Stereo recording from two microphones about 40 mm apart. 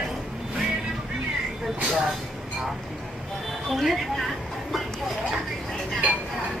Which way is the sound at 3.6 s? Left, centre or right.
Centre.